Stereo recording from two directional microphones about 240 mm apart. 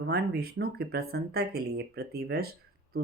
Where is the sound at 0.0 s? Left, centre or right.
Right.